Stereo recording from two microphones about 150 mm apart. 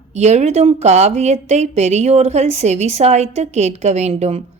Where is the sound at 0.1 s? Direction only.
50° right (ahead or behind).